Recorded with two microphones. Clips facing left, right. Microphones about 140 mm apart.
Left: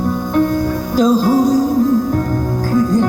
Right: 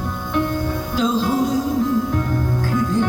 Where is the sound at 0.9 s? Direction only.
40° left (ahead or behind).